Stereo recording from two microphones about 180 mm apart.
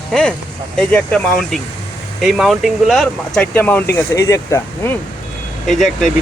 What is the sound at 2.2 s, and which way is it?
Speech, centre (ahead or behind).